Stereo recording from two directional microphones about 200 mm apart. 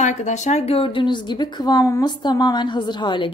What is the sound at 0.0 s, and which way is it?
A woman's voice, 35° left (ahead or behind).